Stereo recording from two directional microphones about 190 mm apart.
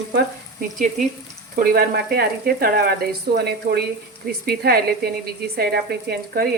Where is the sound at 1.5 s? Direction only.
55° right (ahead or behind).